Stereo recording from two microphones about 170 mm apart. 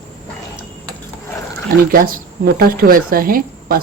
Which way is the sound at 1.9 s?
55° right (ahead or behind).